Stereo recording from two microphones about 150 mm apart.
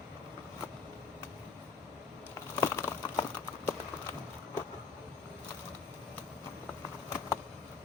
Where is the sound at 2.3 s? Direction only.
20° left (ahead or behind).